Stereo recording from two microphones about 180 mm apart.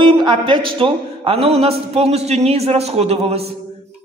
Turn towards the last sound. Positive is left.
turn(degrees=-35)  # may be behind; listen again after turning